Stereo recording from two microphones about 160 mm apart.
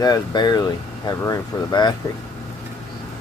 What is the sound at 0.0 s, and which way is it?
Speech, 25° left (ahead or behind).